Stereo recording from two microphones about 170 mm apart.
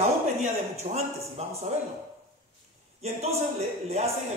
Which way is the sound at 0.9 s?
40° right (ahead or behind).